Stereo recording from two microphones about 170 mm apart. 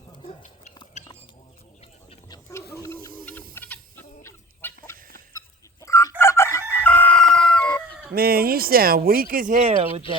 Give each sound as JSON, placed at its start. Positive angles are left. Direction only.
{"t": 0.1, "sound": "a sound", "side_deg": 35}
{"t": 2.8, "sound": "a sound", "side_deg": 15}
{"t": 3.5, "sound": "chicken", "side_deg": 10}
{"t": 6.7, "sound": "fowl", "side_deg": 10}
{"t": 8.1, "sound": "speech", "side_deg": -60}
{"t": 9.6, "sound": "speech", "side_deg": -40}